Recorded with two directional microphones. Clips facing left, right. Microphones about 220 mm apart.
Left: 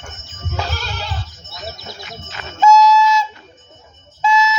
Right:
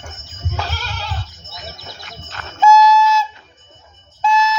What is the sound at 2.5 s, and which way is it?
Train, 10° right (ahead or behind).